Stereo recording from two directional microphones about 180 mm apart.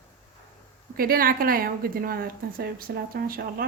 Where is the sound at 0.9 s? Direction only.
55° right (ahead or behind).